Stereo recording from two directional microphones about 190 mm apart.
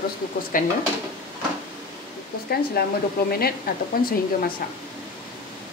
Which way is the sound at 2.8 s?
55° left (ahead or behind).